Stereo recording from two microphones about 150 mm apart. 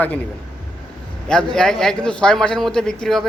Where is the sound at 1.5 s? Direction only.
5° left (ahead or behind).